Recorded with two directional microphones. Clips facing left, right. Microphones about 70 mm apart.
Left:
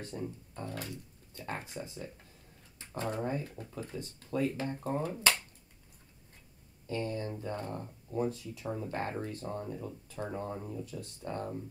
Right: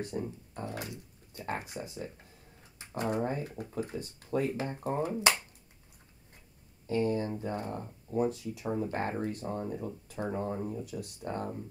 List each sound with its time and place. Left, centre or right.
0.0 s speech: centre
6.9 s speech: centre